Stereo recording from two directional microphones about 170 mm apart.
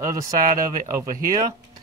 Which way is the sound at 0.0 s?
20° right (ahead or behind).